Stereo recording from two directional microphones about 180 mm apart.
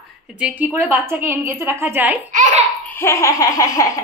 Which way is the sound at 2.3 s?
45° right (ahead or behind).